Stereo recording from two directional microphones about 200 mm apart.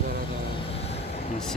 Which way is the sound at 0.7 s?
30° left (ahead or behind).